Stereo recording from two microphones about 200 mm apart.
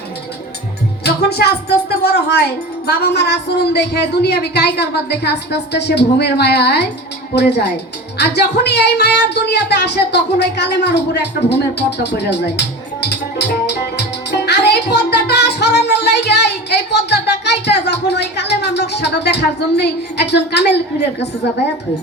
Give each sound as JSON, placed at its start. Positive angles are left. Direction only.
{"t": 1.0, "sound": "speech", "side_deg": 55}